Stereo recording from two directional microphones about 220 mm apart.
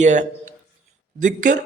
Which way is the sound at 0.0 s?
35° right (ahead or behind).